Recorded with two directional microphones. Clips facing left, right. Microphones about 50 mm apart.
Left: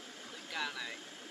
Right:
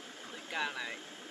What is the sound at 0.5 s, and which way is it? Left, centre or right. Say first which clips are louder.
Speech: right 3 dB; right.